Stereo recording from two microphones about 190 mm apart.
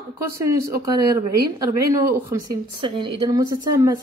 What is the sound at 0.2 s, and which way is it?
Speech, 15° right (ahead or behind).